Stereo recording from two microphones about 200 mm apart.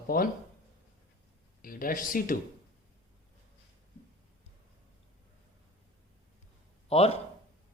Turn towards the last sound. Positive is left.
turn(degrees=30)  # may be behind; listen again after turning